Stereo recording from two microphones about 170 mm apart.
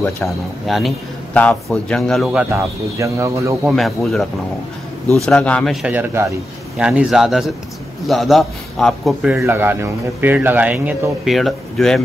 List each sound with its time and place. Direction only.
0.0 s a man's voice: centre (ahead or behind)
2.5 s a man's voice: 15° right (ahead or behind)
3.6 s a man's voice: centre (ahead or behind)
9.4 s a man's voice: 15° right (ahead or behind)